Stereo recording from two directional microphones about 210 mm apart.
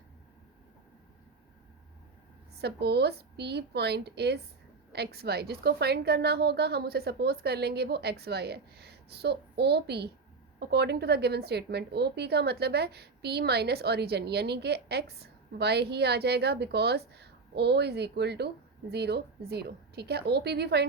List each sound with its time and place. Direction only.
2.6 s a woman's voice: 50° right (ahead or behind)